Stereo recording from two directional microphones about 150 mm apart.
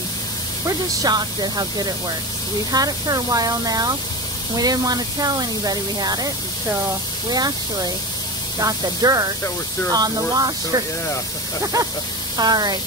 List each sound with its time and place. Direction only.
0.7 s speech: 25° right (ahead or behind)
7.2 s speech: 25° right (ahead or behind)
12.4 s speech: 25° right (ahead or behind)